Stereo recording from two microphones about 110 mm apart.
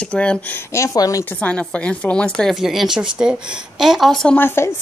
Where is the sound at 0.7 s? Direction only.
30° left (ahead or behind).